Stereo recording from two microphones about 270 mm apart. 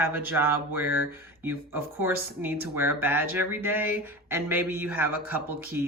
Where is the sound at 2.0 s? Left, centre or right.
Centre.